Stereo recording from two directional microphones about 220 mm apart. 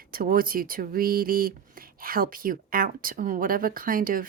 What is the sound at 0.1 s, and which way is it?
Speech, 40° right (ahead or behind).